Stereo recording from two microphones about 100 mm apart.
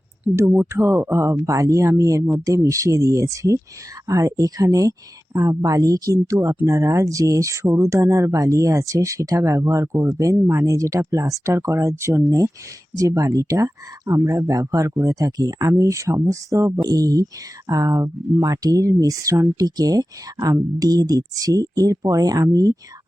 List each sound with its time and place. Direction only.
0.4 s speech: 15° right (ahead or behind)
0.7 s speech: 25° right (ahead or behind)